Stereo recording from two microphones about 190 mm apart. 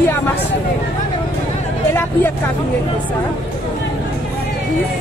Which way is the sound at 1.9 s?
10° left (ahead or behind).